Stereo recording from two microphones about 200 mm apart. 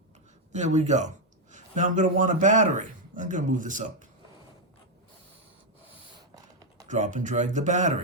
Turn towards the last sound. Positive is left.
turn(degrees=-35)  # may be behind; listen again after turning